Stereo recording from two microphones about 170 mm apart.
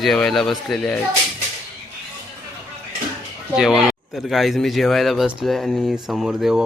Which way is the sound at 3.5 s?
5° right (ahead or behind).